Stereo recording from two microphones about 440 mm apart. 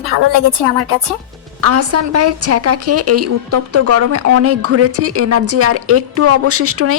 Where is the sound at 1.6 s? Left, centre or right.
Right.